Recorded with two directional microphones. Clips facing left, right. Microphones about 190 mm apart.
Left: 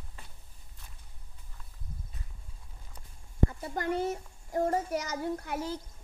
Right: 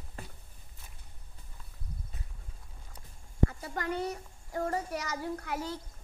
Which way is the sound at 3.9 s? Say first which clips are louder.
Left 4 dB; centre (ahead or behind).